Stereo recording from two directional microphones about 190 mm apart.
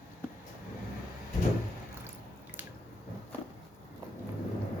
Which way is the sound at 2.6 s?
10° right (ahead or behind).